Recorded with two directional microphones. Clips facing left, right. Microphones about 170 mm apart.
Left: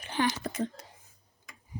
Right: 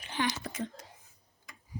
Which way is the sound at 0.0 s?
45° left (ahead or behind).